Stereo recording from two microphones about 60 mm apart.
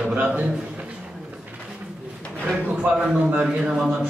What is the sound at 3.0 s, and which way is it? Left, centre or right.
Speech, right.